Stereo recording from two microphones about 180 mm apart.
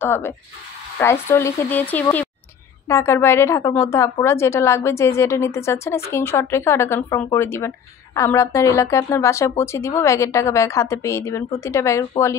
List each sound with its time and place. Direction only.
0.0 s a woman's voice: 15° left (ahead or behind)